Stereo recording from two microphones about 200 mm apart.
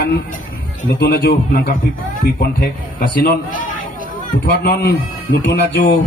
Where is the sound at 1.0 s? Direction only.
50° left (ahead or behind).